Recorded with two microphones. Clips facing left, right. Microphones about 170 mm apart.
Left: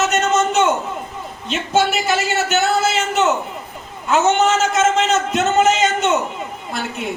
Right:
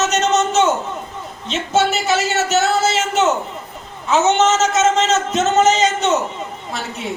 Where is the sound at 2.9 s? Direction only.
Centre (ahead or behind).